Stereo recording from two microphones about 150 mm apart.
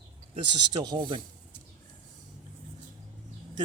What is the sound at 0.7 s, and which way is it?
Speech, 30° right (ahead or behind).